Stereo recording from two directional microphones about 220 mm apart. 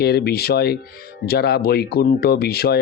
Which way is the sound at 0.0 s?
45° left (ahead or behind).